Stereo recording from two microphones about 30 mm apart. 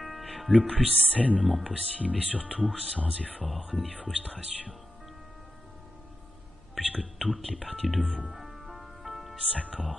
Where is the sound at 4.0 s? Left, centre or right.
Right.